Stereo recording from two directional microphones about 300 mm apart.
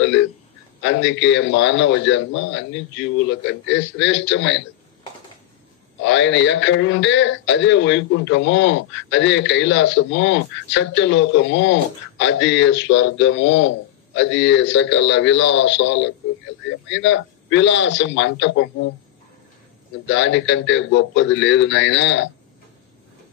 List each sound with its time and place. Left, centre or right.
0.0 s speech: left
6.0 s speech: left
20.1 s speech: left